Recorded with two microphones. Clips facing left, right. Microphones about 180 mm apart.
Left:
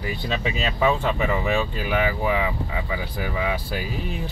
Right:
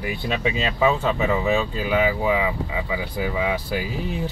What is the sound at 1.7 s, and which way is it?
Speech, 15° right (ahead or behind).